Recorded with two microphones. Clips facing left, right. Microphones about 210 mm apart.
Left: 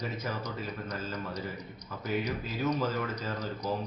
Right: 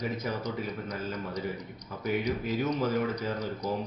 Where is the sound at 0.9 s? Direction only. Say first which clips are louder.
Right 2 dB; 15° right (ahead or behind).